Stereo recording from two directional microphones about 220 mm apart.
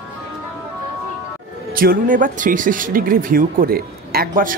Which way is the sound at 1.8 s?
40° right (ahead or behind).